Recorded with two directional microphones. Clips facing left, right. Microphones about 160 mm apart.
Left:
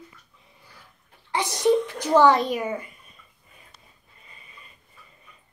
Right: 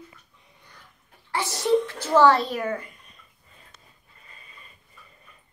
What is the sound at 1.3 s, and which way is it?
A woman's voice, 15° left (ahead or behind).